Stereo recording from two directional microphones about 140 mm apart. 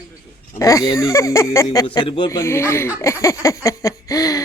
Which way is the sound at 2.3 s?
20° left (ahead or behind).